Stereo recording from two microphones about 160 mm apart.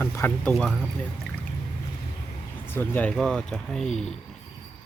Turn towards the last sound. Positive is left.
turn(degrees=5)  # may be behind; listen again after turning